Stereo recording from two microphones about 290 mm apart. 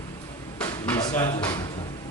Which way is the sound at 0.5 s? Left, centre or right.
Centre.